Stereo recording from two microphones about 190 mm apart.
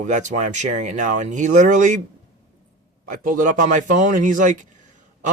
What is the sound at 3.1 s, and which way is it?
Speech, 45° right (ahead or behind).